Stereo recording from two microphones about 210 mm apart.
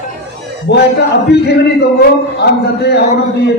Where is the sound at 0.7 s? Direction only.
50° left (ahead or behind).